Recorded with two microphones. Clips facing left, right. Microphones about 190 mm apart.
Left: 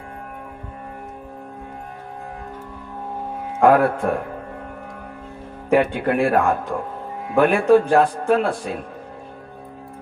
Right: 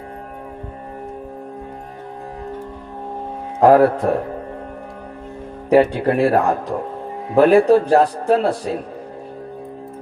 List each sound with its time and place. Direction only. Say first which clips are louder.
3.6 s a man's voice: right 4 dB; 35° right (ahead or behind)
5.7 s a man's voice: right 4 dB; 35° right (ahead or behind)